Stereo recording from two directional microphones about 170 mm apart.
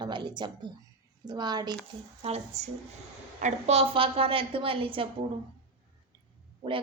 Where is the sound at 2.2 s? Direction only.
40° right (ahead or behind).